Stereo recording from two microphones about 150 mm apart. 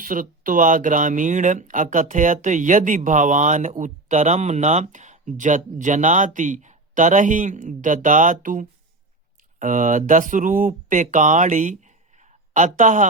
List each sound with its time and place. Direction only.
0.0 s speech: 65° right (ahead or behind)